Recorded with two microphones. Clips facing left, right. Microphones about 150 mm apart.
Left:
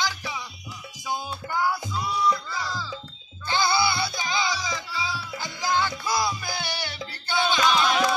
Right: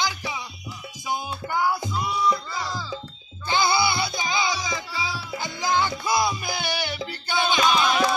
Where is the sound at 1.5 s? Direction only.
20° right (ahead or behind).